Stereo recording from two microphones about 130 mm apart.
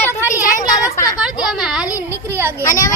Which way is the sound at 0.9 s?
25° left (ahead or behind).